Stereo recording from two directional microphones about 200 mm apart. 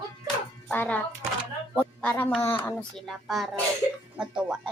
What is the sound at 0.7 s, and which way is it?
Speech, 10° left (ahead or behind).